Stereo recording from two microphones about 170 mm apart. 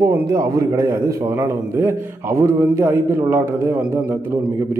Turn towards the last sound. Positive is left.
turn(degrees=-15)  # may be behind; listen again after turning